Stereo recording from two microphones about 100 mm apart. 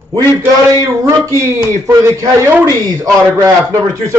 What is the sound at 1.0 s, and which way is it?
Speech, 30° right (ahead or behind).